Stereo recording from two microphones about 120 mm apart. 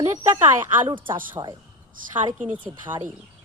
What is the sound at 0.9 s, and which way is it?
Speech, 45° right (ahead or behind).